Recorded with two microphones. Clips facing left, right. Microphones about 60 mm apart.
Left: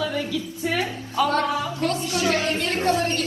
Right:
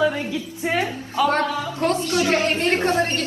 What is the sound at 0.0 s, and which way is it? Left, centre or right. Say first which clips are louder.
A woman's voice: right 4 dB; right.